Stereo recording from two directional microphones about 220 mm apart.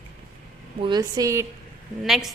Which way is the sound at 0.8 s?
20° right (ahead or behind).